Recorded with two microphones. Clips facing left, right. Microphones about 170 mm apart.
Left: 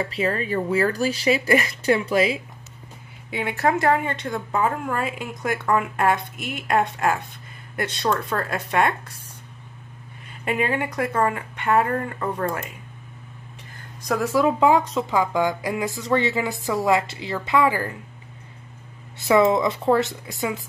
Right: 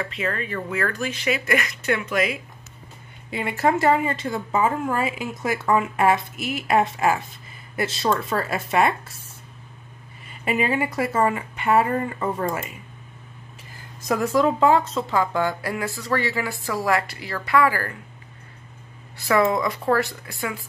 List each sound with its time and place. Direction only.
0.0 s speech: 30° left (ahead or behind)
3.3 s a woman's voice: centre (ahead or behind)
10.2 s a woman's voice: 5° right (ahead or behind)
13.7 s speech: centre (ahead or behind); by 17.9 s 20° left (ahead or behind)
19.1 s speech: 20° left (ahead or behind)